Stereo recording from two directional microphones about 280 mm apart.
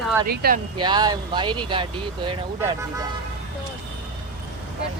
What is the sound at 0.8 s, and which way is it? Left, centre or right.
Speech, centre.